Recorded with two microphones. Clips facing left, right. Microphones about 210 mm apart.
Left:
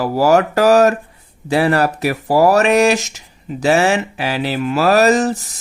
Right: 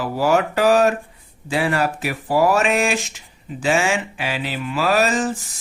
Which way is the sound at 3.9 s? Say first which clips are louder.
Left 5 dB; 40° left (ahead or behind).